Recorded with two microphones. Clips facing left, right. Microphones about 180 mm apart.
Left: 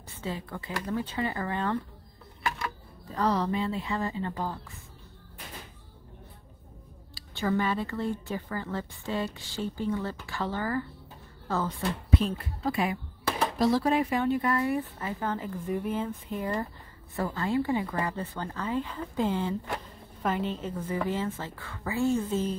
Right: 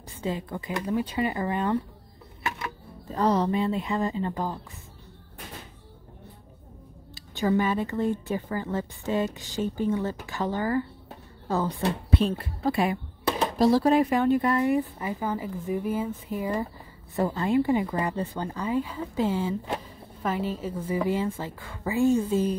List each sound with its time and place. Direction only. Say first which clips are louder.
0.2 s speech: right 5 dB; 15° right (ahead or behind)
3.2 s speech: right 4 dB; 20° right (ahead or behind)
7.2 s speech: right 4 dB; 15° right (ahead or behind)
12.3 s speech: right 4 dB; 30° right (ahead or behind); by 14.4 s 50° right (ahead or behind)
14.4 s speech: right 4 dB; 25° right (ahead or behind)
14.8 s speech: right 4 dB; 10° right (ahead or behind)
17.1 s speech: right 5 dB; 20° right (ahead or behind)